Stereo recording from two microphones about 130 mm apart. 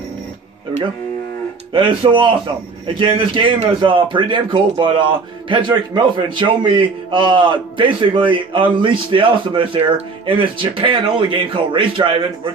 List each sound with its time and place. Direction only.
1.7 s a man's voice: 40° right (ahead or behind)